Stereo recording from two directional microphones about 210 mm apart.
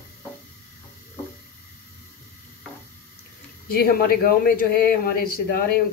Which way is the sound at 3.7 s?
45° left (ahead or behind).